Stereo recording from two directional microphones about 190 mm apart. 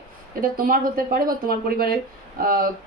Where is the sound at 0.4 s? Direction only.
50° right (ahead or behind).